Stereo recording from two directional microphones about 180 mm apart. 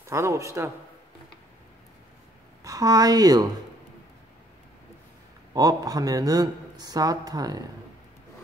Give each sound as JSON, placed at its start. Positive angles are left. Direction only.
{"t": 0.1, "sound": "a man's voice", "side_deg": -15}
{"t": 2.6, "sound": "a woman's voice", "side_deg": -20}
{"t": 5.5, "sound": "speech", "side_deg": -20}